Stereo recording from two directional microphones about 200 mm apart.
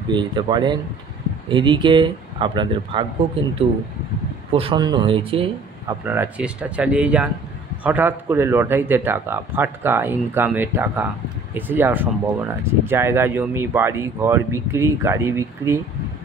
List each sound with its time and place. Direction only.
0.1 s speech: 25° right (ahead or behind)
4.5 s speech: 30° right (ahead or behind)
5.9 s speech: 10° right (ahead or behind)